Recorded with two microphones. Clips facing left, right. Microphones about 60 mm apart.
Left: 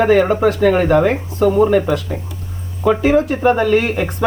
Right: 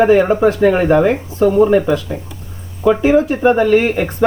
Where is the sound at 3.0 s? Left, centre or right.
Right.